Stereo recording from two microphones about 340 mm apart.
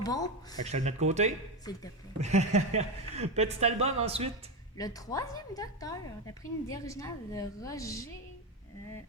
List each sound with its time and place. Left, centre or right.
0.0 s speech: centre
0.6 s a woman's voice: centre
1.7 s a woman's voice: centre
2.2 s a woman's voice: centre
4.8 s a woman's voice: centre